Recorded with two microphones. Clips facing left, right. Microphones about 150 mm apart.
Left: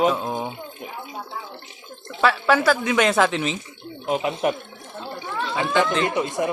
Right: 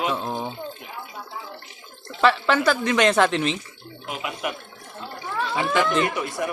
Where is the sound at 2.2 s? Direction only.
5° left (ahead or behind).